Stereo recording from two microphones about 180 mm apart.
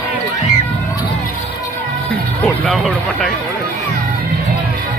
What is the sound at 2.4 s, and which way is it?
Speech, centre (ahead or behind).